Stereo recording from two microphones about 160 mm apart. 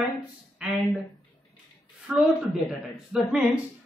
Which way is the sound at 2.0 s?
5° right (ahead or behind).